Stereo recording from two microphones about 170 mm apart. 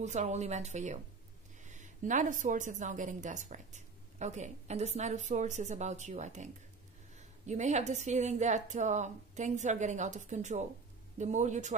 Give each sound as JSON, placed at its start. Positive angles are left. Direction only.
{"t": 0.0, "sound": "a woman's voice", "side_deg": -45}